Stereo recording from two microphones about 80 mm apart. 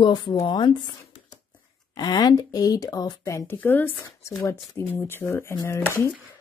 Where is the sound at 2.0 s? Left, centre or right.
Left.